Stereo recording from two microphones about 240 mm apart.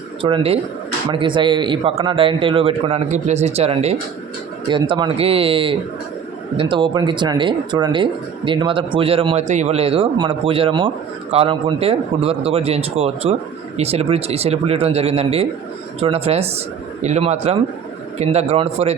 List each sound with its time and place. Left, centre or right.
0.2 s speech: right